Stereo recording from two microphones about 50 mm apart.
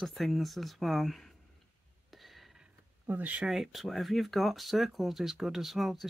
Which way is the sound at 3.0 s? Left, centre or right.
Right.